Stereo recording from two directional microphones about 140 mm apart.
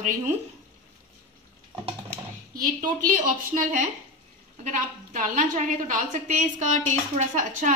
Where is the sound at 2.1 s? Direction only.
85° right.